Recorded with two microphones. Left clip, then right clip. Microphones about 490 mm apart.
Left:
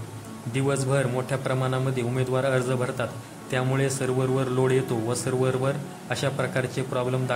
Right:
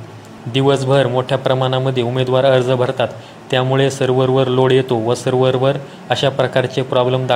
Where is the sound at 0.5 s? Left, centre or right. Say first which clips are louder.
Right 12 dB; left.